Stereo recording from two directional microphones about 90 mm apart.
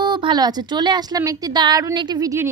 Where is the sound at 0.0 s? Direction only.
55° right (ahead or behind).